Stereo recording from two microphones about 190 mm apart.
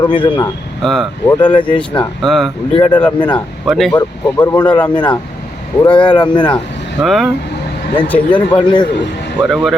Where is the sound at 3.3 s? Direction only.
Centre (ahead or behind).